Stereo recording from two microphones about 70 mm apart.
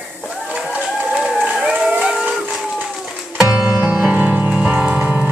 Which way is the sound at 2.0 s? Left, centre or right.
Centre.